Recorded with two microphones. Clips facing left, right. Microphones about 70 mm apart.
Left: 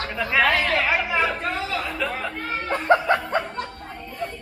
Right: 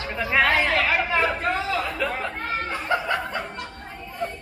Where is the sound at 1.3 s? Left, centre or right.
Centre.